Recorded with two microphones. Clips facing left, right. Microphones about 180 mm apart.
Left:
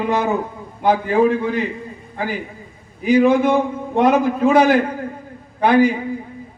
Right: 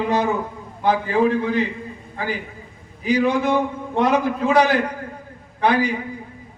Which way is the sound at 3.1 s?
50° left (ahead or behind).